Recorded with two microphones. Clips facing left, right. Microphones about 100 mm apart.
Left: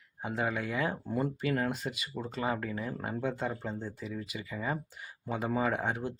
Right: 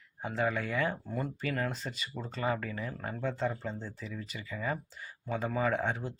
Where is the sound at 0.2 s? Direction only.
10° left (ahead or behind).